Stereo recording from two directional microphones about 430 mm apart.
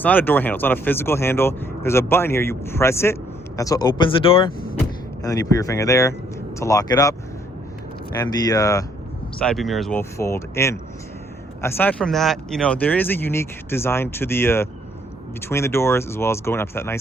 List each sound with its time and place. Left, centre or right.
0.0 s speech: centre
8.2 s speech: centre